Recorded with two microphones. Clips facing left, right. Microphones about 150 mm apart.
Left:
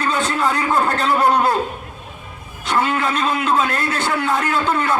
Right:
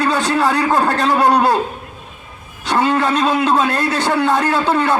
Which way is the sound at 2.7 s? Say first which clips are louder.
Right 4 dB; 35° right (ahead or behind).